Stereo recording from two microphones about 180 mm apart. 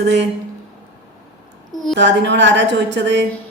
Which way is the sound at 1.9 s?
75° right (ahead or behind).